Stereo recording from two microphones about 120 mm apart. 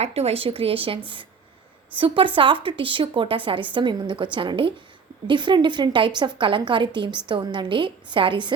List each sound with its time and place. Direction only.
0.0 s a woman's voice: 60° right (ahead or behind); by 8.5 s 40° right (ahead or behind)